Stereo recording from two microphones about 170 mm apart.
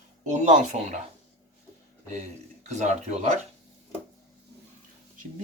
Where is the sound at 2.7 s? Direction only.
45° right (ahead or behind).